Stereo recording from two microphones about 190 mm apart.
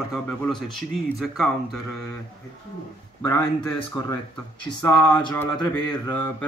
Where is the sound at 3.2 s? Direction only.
10° left (ahead or behind).